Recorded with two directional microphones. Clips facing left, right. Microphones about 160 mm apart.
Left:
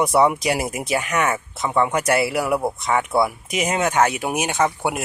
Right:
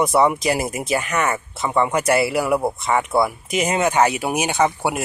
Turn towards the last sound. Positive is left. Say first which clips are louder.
# right 2 dB
turn(degrees=-5)  # may be behind; listen again after turning